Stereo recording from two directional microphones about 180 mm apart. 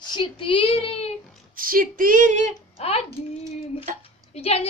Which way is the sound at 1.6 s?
50° right (ahead or behind).